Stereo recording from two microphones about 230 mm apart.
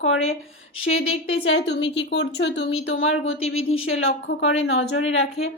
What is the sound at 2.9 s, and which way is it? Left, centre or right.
A woman's voice, left.